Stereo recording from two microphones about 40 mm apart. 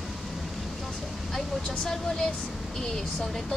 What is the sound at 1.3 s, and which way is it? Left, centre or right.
Speech, centre.